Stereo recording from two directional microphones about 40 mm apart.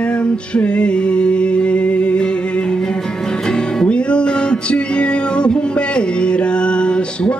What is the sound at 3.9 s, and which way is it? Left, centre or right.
Music, left.